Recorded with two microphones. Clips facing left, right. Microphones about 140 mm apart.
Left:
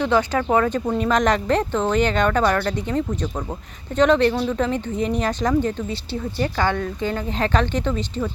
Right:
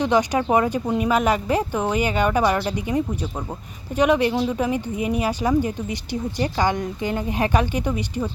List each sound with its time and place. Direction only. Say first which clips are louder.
0.0 s speech: even; 15° right (ahead or behind)